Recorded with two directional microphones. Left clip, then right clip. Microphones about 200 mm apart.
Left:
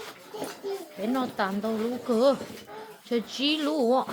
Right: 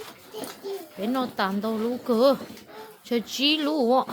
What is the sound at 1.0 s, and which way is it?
Speech, 30° right (ahead or behind).